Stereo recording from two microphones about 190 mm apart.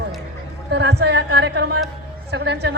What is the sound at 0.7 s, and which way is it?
Speech, 60° right (ahead or behind).